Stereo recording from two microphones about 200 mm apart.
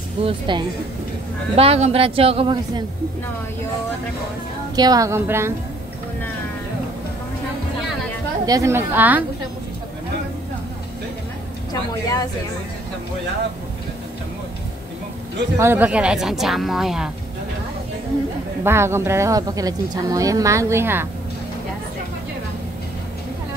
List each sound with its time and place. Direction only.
0.2 s a woman's voice: 25° right (ahead or behind)
4.7 s speech: 20° right (ahead or behind)
8.5 s speech: 15° right (ahead or behind)
15.5 s speech: 10° right (ahead or behind)
18.6 s speech: 10° right (ahead or behind)